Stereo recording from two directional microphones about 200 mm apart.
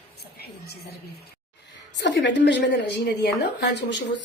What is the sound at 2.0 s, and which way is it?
A woman's voice, 65° left (ahead or behind).